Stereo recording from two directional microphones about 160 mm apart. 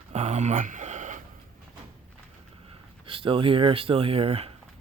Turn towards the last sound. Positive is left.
turn(degrees=-35)  # may be behind; listen again after turning